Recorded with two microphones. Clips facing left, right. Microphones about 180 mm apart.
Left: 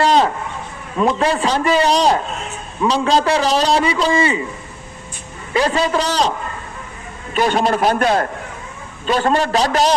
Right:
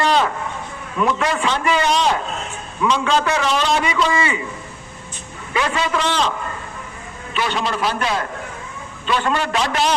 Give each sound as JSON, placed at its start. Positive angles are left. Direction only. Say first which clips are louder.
{"t": 0.0, "sound": "a sound", "louder": "left 3 dB", "side_deg": 35}
{"t": 0.9, "sound": "a man's voice", "louder": "left 3 dB", "side_deg": 35}
{"t": 5.5, "sound": "a man's voice", "louder": "left 4 dB", "side_deg": 35}
{"t": 7.3, "sound": "a man's voice", "louder": "left 6 dB", "side_deg": 45}